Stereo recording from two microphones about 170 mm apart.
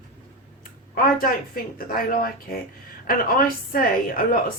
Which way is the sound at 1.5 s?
60° left (ahead or behind).